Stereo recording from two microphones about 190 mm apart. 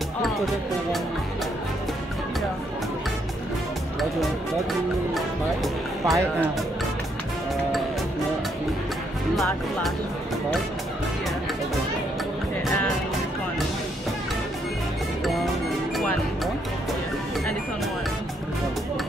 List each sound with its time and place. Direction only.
5.1 s music: centre (ahead or behind)
9.3 s speech: centre (ahead or behind)